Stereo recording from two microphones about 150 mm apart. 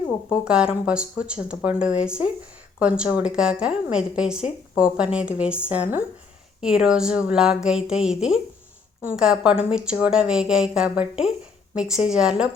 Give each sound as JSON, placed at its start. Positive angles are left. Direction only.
{"t": 0.3, "sound": "a woman's voice", "side_deg": -5}